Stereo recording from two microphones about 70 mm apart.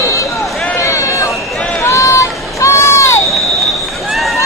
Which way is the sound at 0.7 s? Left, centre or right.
Left.